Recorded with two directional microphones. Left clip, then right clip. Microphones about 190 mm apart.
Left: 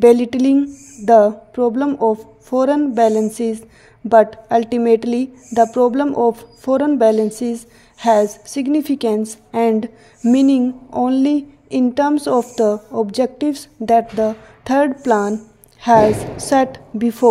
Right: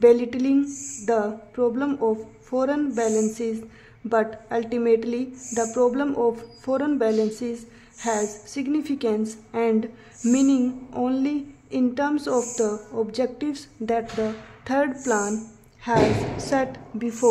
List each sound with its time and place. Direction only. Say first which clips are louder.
0.0 s a woman's voice: left 6 dB; 30° left (ahead or behind)